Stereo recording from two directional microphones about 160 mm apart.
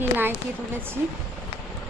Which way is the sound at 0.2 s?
15° right (ahead or behind).